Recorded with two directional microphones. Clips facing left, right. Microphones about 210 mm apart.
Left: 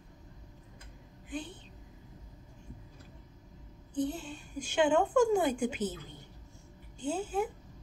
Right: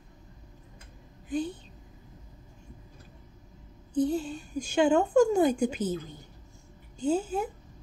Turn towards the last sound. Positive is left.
turn(degrees=-40)  # may be behind; listen again after turning